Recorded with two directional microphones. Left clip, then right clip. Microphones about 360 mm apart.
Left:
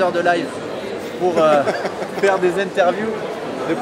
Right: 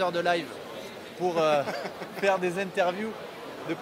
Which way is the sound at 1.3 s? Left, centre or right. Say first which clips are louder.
Left 10 dB; right.